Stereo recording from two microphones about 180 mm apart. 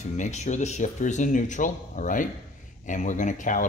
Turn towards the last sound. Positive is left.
turn(degrees=45)  # may be behind; listen again after turning